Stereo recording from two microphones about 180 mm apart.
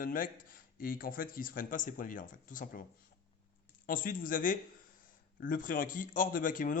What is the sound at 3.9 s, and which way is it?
A man's voice, 50° left (ahead or behind).